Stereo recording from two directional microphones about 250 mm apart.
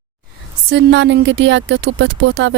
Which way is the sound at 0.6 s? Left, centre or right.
Right.